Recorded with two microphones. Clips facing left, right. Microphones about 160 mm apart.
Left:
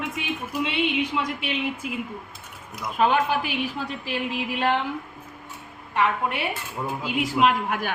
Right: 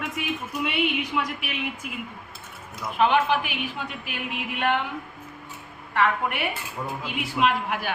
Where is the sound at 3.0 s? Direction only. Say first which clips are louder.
Even; 40° left (ahead or behind).